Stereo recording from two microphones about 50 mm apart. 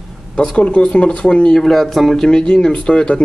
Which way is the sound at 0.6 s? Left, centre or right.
Left.